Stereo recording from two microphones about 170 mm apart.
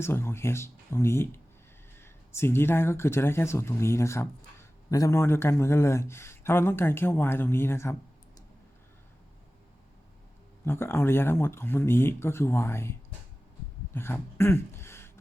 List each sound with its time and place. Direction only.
0.0 s speech: 15° left (ahead or behind)
10.7 s speech: 15° left (ahead or behind)
13.9 s a sound: 15° left (ahead or behind)